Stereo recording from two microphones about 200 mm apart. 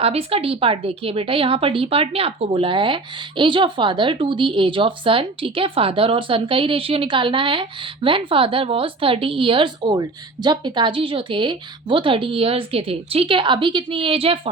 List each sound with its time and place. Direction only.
0.0 s speech: 30° right (ahead or behind)